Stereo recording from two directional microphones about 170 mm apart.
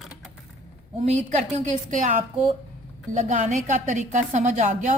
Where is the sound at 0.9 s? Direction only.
40° right (ahead or behind).